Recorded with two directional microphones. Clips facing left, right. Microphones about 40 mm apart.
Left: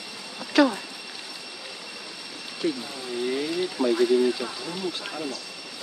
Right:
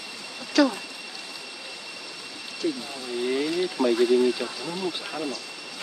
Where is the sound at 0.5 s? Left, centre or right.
Left.